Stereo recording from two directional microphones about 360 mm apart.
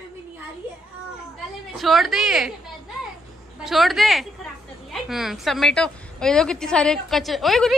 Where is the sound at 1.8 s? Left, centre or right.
Centre.